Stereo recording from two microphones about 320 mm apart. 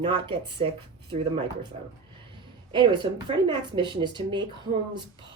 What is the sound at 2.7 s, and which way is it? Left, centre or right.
Speech, centre.